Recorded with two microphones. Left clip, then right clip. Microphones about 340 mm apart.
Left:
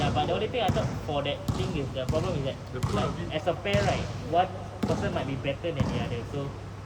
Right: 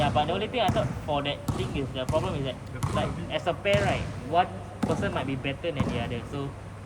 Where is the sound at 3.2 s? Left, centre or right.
Centre.